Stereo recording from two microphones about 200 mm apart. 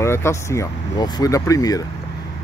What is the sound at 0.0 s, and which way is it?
Speech, 15° left (ahead or behind).